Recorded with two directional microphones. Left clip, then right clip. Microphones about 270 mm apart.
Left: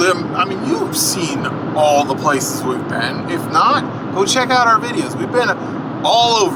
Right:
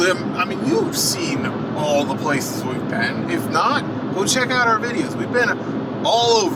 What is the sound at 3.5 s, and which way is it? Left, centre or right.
Speech, centre.